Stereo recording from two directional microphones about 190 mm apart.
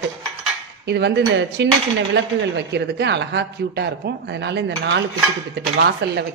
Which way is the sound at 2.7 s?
65° right (ahead or behind).